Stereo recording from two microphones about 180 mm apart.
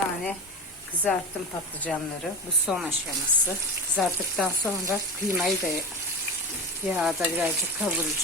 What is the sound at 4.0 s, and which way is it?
Frying, centre (ahead or behind).